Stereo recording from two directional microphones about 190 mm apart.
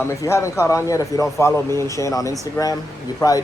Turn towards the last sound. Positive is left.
turn(degrees=20)  # may be behind; listen again after turning